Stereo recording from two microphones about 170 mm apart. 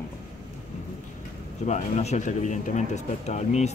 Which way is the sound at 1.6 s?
40° left (ahead or behind).